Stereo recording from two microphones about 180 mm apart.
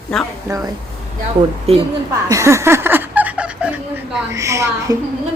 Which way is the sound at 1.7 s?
35° right (ahead or behind).